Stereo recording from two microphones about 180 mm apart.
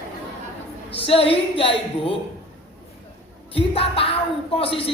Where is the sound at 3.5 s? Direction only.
30° left (ahead or behind).